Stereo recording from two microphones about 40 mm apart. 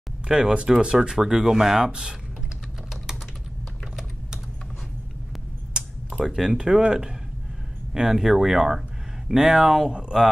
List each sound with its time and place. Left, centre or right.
0.3 s speech: centre
6.1 s speech: centre